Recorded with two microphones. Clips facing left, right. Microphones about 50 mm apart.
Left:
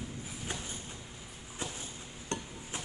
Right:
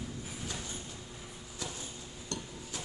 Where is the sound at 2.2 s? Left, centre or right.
Left.